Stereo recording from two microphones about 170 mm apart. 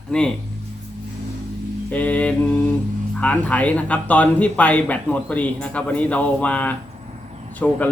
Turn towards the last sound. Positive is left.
turn(degrees=10)  # may be behind; listen again after turning